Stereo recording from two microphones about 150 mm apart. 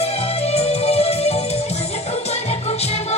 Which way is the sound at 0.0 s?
45° left (ahead or behind).